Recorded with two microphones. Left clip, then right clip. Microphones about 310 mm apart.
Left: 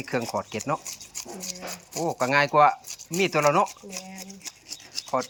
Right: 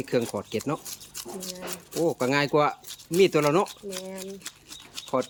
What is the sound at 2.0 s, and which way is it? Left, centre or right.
Speech, centre.